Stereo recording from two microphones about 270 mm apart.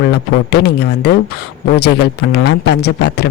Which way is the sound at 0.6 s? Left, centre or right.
Left.